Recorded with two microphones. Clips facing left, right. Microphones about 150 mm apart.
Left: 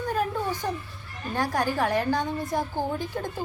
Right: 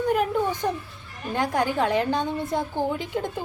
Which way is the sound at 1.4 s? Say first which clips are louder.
Right 2 dB; 20° right (ahead or behind).